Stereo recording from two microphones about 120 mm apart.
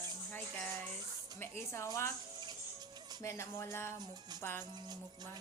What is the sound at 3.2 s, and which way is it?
Speech, 25° left (ahead or behind).